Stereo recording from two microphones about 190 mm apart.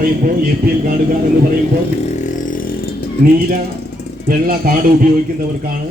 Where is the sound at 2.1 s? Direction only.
40° left (ahead or behind).